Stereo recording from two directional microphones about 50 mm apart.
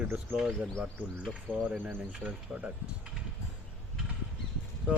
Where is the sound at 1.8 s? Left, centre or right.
Right.